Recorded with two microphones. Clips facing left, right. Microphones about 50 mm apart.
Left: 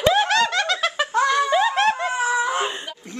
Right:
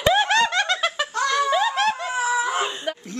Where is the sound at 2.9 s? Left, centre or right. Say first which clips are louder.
Right 9 dB; right.